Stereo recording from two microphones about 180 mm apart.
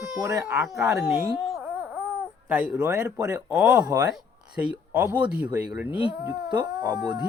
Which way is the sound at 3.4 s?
15° right (ahead or behind).